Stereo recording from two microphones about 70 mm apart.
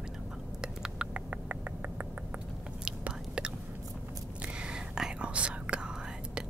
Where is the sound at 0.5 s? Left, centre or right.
Centre.